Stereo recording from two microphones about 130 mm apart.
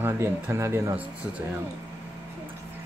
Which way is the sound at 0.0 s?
20° right (ahead or behind).